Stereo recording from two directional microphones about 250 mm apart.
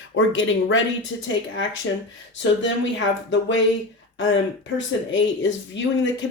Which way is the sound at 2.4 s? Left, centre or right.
Left.